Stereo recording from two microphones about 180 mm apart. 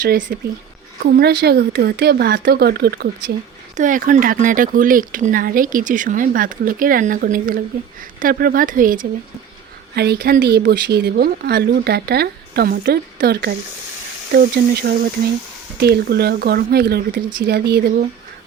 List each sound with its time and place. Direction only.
0.0 s speech: 45° right (ahead or behind)
1.1 s speech: 60° right (ahead or behind)
3.8 s speech: 45° right (ahead or behind)
9.9 s speech: 65° right (ahead or behind)